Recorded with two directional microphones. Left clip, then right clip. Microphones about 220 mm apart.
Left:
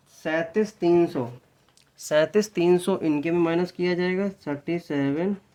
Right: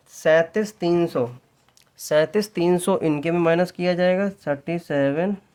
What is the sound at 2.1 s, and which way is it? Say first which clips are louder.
Speech: right 2 dB; 20° right (ahead or behind).